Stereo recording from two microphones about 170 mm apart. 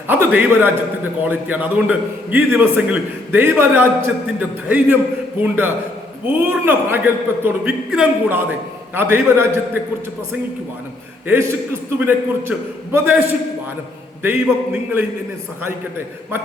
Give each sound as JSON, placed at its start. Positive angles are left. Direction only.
{"t": 0.1, "sound": "a man's voice", "side_deg": -10}
{"t": 11.3, "sound": "a man's voice", "side_deg": -15}